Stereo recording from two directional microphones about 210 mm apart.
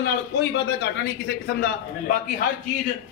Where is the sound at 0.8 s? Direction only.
50° left (ahead or behind).